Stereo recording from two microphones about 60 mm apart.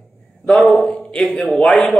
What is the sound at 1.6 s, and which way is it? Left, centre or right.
Speech, centre.